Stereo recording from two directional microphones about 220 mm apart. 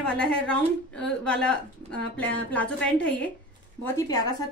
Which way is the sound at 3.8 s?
15° left (ahead or behind).